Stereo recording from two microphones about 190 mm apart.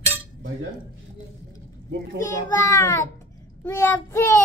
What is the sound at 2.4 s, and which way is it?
Child singing, 15° left (ahead or behind).